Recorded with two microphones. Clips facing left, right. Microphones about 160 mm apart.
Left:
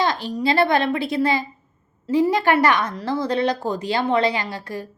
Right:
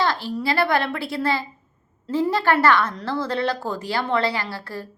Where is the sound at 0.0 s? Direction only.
20° left (ahead or behind).